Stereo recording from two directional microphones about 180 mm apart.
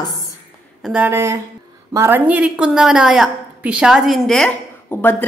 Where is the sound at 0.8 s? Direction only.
5° right (ahead or behind).